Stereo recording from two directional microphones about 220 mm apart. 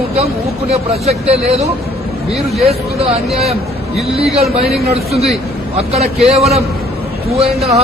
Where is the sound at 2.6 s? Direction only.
25° right (ahead or behind).